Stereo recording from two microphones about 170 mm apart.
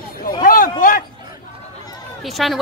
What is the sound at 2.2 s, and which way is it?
Speech, centre (ahead or behind).